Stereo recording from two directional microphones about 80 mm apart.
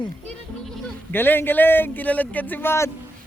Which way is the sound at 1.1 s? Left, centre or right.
Left.